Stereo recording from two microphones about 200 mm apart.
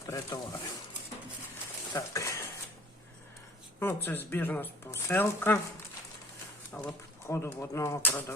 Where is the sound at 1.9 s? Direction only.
15° left (ahead or behind).